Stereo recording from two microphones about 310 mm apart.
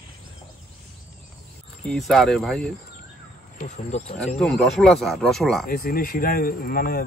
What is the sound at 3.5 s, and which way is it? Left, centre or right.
Speech, left.